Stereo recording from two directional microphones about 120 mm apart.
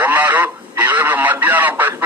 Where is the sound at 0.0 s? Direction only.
15° right (ahead or behind).